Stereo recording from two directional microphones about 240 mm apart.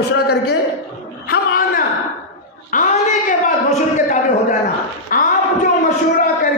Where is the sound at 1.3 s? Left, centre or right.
Left.